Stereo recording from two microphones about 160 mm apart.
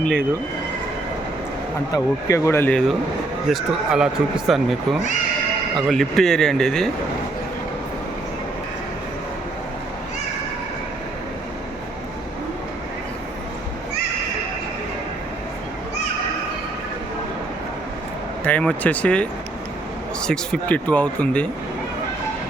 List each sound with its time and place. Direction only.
0.0 s speech: 5° left (ahead or behind)
2.2 s speech: 20° left (ahead or behind)
3.5 s speech: 5° right (ahead or behind)
18.4 s speech: 10° left (ahead or behind)